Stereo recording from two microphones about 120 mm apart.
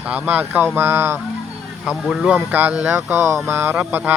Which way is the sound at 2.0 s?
Centre (ahead or behind).